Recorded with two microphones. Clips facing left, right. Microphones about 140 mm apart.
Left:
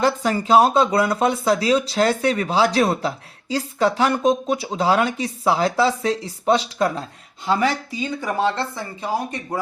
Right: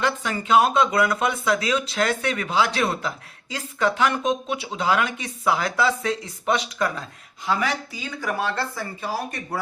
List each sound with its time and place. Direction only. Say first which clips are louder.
0.0 s speech: left 5 dB; 35° left (ahead or behind); by 9.6 s 20° left (ahead or behind)